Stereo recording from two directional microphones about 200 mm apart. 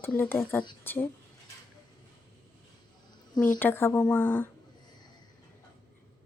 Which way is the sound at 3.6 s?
10° left (ahead or behind).